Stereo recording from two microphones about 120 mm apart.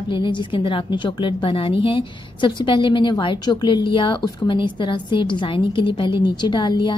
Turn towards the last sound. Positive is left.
turn(degrees=40)  # may be behind; listen again after turning